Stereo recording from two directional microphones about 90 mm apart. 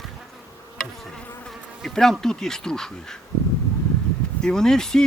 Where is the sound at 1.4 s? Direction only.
5° left (ahead or behind).